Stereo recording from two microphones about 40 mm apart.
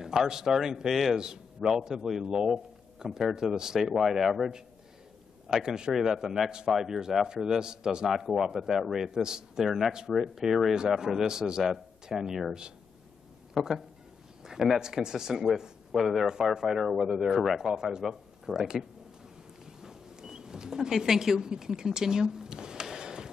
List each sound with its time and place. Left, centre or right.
0.0 s a man's voice: centre
5.5 s a man's voice: centre
13.6 s a man's voice: centre
14.4 s a sound: centre
14.8 s a man's voice: centre
17.7 s a man's voice: centre
19.6 s a sound: centre